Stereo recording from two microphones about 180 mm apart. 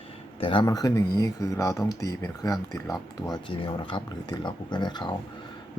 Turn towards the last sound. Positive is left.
turn(degrees=25)  # may be behind; listen again after turning